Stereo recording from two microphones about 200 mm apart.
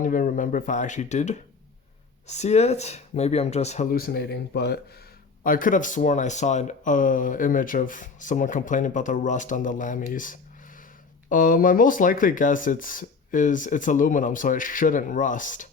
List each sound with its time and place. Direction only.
0.0 s speech: 45° left (ahead or behind)
5.4 s speech: 45° left (ahead or behind)